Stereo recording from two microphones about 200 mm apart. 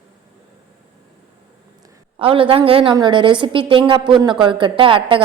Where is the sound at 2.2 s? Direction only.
25° right (ahead or behind).